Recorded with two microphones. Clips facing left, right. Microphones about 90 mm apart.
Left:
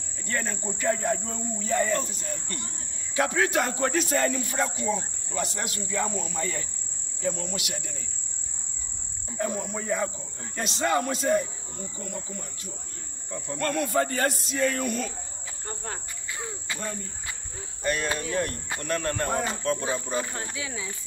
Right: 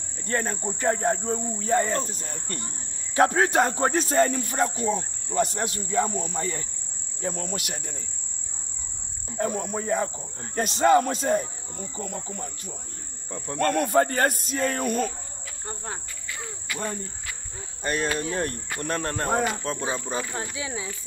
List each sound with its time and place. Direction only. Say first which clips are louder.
0.3 s speech: right 3 dB; 40° right (ahead or behind)
9.4 s speech: right 3 dB; 45° right (ahead or behind)
13.5 s speech: right 4 dB; 55° right (ahead or behind)
16.3 s cricket: even; 25° left (ahead or behind)
18.2 s speech: even; 35° right (ahead or behind)